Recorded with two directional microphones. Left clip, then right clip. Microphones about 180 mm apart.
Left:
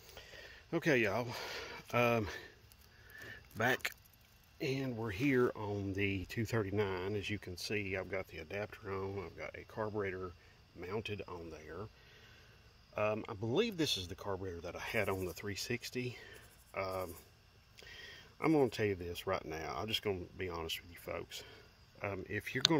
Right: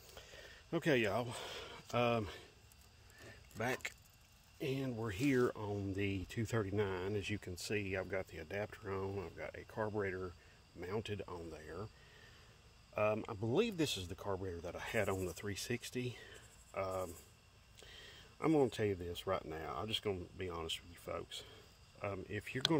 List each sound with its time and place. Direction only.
0.0 s a sound: 5° left (ahead or behind); by 2.4 s 25° left (ahead or behind)
3.3 s keys jangling: 25° left (ahead or behind)
4.6 s speech: 10° left (ahead or behind)
12.9 s speech: 5° right (ahead or behind); by 22.8 s 15° left (ahead or behind)